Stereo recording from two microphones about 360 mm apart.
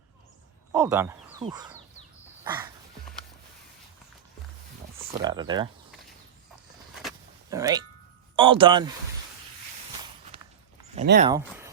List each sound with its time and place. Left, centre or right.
0.7 s speech: centre
2.4 s dog: centre
5.2 s speech: centre
7.5 s speech: centre
10.9 s speech: right
11.3 s speech: centre